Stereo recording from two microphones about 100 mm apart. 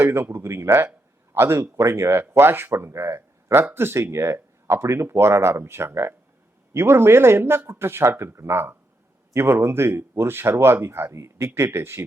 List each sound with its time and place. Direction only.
0.0 s speech: 25° right (ahead or behind)